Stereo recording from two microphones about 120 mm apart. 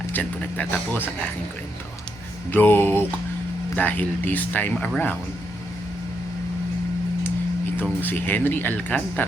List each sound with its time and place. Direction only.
0.1 s speech: 15° left (ahead or behind)
2.5 s speech: 15° left (ahead or behind)
7.8 s speech: 15° left (ahead or behind)